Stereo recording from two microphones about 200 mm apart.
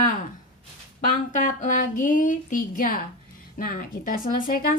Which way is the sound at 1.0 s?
40° left (ahead or behind).